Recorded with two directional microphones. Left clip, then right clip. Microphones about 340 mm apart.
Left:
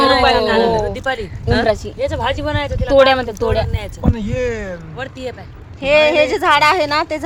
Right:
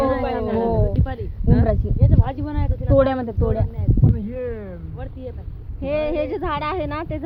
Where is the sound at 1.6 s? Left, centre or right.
Centre.